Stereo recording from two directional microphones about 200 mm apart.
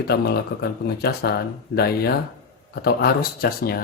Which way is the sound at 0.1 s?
55° left (ahead or behind).